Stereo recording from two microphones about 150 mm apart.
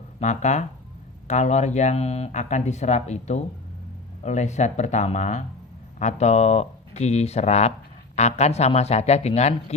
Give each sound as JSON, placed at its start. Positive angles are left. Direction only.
{"t": 0.2, "sound": "speech", "side_deg": 50}